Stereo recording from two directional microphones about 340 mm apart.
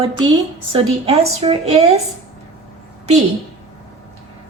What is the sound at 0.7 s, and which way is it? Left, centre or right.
A woman's voice, centre.